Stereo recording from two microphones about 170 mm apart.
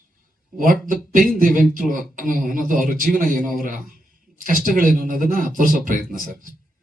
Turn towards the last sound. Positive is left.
turn(degrees=-50)  # may be behind; listen again after turning